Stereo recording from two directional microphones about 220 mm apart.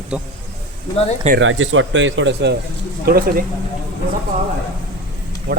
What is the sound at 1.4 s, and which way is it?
Speech, 60° right (ahead or behind).